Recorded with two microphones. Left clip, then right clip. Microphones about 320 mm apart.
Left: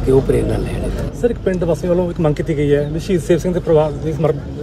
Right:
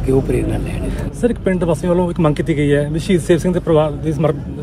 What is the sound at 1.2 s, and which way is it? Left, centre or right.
Speech, right.